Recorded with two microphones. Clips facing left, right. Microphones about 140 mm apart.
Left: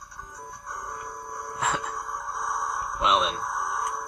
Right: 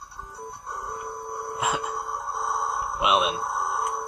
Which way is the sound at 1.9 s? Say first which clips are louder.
Right 3 dB; 30° right (ahead or behind).